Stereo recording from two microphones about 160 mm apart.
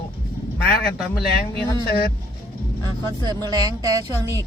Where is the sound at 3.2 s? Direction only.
25° right (ahead or behind).